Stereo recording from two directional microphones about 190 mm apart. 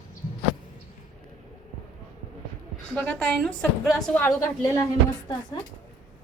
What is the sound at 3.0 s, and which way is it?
A woman's voice, 5° left (ahead or behind).